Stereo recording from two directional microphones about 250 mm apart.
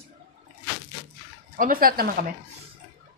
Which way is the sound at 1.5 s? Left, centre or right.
Right.